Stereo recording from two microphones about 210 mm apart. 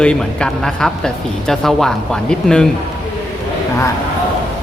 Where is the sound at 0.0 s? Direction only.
5° left (ahead or behind).